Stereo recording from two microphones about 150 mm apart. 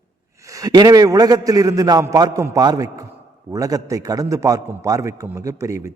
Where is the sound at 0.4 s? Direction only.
20° right (ahead or behind).